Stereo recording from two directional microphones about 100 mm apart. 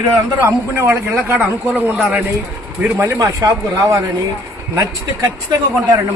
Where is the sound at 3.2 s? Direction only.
35° right (ahead or behind).